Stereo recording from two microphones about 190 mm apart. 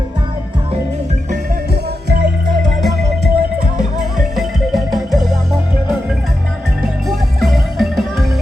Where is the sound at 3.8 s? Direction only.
Centre (ahead or behind).